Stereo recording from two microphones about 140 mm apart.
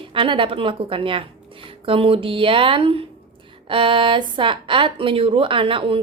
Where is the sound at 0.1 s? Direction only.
40° right (ahead or behind).